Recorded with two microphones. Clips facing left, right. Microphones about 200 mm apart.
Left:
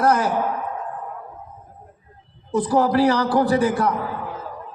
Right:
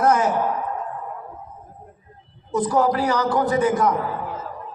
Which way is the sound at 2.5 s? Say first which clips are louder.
Left 2 dB; 35° left (ahead or behind).